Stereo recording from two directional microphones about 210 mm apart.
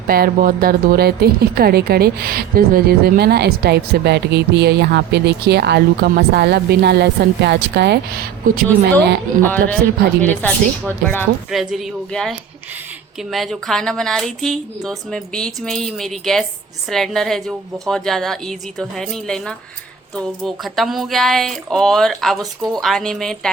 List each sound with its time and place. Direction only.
0.1 s a woman's voice: 45° right (ahead or behind)
9.4 s a woman's voice: 10° left (ahead or behind)